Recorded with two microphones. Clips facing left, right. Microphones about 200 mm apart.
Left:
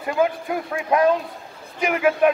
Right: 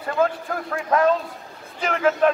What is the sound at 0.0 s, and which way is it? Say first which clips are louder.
A man's voice: left 1 dB; 15° left (ahead or behind).